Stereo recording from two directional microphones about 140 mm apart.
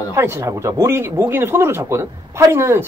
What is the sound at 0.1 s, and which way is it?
Speech, 20° right (ahead or behind).